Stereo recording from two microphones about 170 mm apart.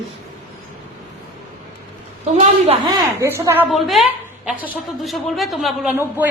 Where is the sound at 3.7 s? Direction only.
Centre (ahead or behind).